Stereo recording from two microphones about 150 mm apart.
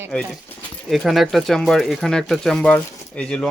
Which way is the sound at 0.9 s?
Centre (ahead or behind).